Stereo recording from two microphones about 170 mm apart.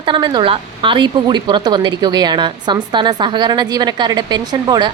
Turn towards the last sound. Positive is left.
turn(degrees=-25)  # may be behind; listen again after turning